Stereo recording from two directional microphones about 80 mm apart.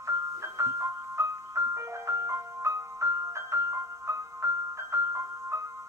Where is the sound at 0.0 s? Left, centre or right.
Right.